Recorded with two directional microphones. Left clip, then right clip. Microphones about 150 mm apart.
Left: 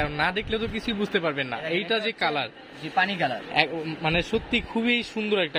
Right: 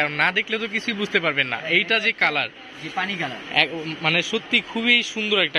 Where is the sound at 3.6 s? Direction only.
20° left (ahead or behind).